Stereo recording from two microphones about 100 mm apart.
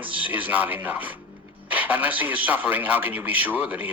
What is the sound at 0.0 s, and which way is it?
A man's voice, 15° right (ahead or behind).